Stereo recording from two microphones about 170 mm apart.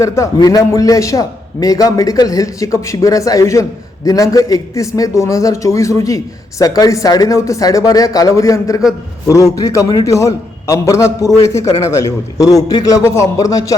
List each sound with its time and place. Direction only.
0.0 s a man's voice: 20° left (ahead or behind)